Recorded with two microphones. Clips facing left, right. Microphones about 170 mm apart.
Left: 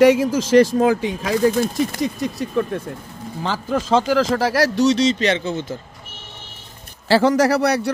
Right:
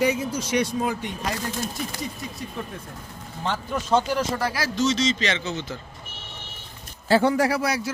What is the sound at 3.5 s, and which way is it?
Speech, 90° left.